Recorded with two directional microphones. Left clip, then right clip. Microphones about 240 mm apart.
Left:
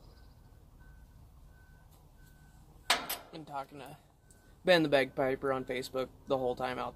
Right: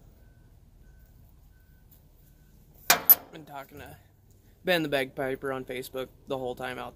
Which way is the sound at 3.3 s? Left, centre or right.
Centre.